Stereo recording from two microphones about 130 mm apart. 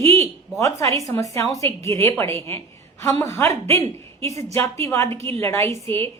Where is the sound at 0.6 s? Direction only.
25° left (ahead or behind).